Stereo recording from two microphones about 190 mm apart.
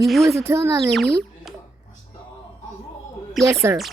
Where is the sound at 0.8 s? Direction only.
Centre (ahead or behind).